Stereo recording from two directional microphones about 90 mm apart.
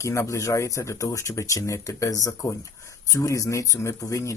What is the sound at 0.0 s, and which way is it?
Speech, 35° left (ahead or behind).